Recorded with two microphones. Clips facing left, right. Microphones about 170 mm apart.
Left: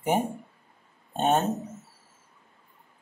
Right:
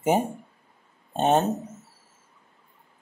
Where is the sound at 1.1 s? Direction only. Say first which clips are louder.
Right 3 dB; 20° right (ahead or behind).